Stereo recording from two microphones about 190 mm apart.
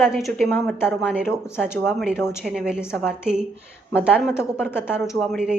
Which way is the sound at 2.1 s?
15° left (ahead or behind).